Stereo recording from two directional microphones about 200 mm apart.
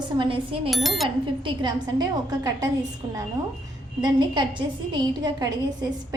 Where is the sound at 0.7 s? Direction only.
Centre (ahead or behind).